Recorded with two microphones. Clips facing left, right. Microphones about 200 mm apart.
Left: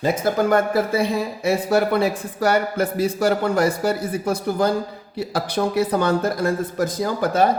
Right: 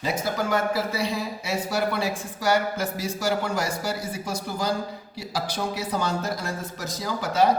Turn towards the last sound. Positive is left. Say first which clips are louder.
# left 4 dB
turn(degrees=50)  # may be behind; listen again after turning